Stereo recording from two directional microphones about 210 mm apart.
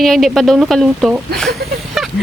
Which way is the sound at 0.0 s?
Centre (ahead or behind).